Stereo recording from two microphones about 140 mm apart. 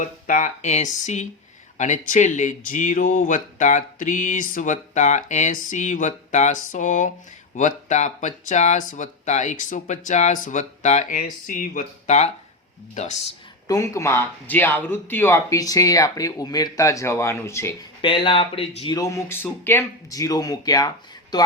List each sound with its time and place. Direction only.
0.0 s speech: 65° left (ahead or behind)
13.7 s speech: 25° left (ahead or behind)
18.0 s speech: 35° left (ahead or behind)
18.9 s speech: 20° left (ahead or behind)